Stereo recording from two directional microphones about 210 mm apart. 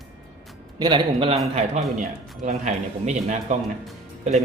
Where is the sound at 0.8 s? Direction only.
20° right (ahead or behind).